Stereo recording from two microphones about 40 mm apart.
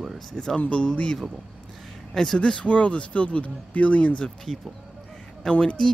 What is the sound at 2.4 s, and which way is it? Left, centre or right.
Speech, left.